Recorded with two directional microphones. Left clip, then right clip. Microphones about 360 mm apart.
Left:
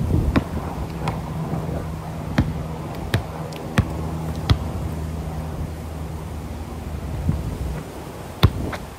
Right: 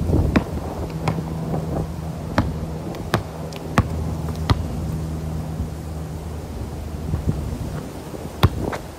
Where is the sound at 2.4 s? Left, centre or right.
Centre.